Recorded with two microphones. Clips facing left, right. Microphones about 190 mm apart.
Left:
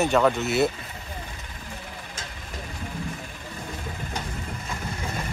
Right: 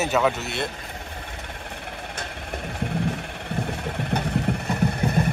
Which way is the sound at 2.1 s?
65° right (ahead or behind).